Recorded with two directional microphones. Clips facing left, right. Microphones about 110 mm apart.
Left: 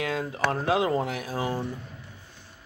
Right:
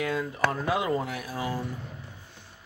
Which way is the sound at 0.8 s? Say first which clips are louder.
Left 2 dB; 30° left (ahead or behind).